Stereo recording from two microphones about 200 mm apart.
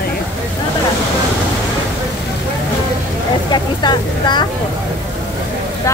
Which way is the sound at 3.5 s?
20° left (ahead or behind).